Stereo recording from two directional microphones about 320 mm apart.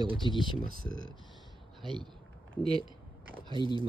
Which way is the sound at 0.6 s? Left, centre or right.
Right.